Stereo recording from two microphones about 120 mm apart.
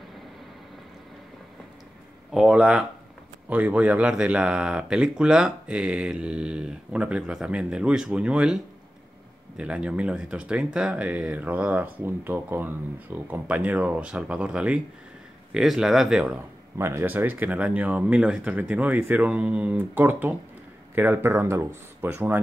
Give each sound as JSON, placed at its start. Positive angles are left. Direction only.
{"t": 2.3, "sound": "speech", "side_deg": -5}
{"t": 9.6, "sound": "speech", "side_deg": -10}
{"t": 16.7, "sound": "speech", "side_deg": -20}